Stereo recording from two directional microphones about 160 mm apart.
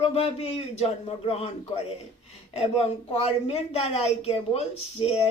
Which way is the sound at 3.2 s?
40° left (ahead or behind).